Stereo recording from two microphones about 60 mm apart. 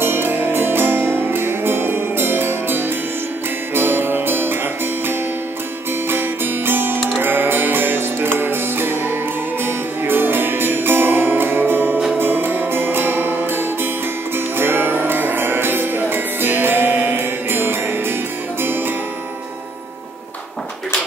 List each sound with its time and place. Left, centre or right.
0.0 s music: right
6.0 s music: right